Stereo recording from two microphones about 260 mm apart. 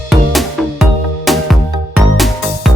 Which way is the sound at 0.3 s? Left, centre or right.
Centre.